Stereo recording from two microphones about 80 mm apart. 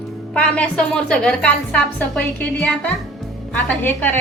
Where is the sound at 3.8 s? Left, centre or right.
Left.